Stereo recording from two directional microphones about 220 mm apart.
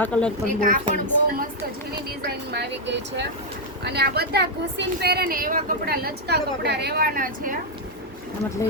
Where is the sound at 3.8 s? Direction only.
45° right (ahead or behind).